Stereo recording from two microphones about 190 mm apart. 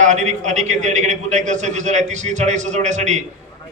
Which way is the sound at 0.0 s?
40° right (ahead or behind).